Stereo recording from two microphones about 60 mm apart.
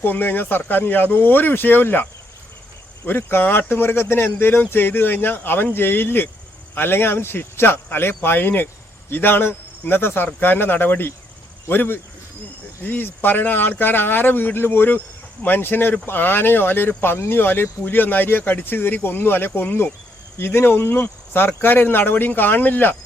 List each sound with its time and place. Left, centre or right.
0.0 s speech: left